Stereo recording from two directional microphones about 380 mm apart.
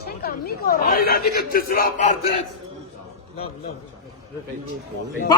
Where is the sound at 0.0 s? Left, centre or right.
Left.